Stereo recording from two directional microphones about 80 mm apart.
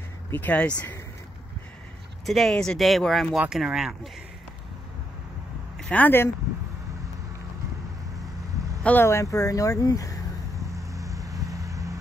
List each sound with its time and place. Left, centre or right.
0.3 s speech: left
0.6 s speech: centre
2.2 s speech: centre
5.8 s a sound: centre
6.0 s speech: left
9.0 s speech: left
10.7 s vehicle: right